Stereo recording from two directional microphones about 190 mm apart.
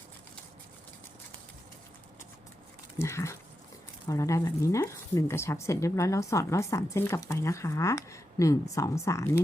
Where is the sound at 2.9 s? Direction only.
15° left (ahead or behind).